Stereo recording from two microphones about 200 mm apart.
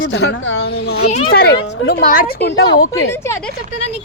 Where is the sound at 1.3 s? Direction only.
55° left (ahead or behind).